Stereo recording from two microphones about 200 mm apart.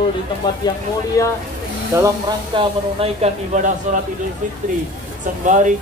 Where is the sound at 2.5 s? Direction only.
30° right (ahead or behind).